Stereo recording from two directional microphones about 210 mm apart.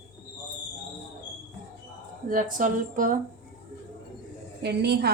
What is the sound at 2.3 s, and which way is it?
Speech, 40° right (ahead or behind).